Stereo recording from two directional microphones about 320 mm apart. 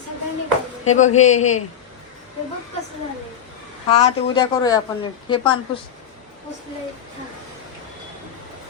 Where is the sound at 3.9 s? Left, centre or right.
Centre.